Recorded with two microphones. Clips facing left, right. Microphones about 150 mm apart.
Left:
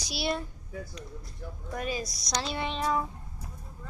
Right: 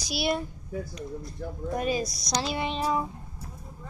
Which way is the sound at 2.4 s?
10° right (ahead or behind).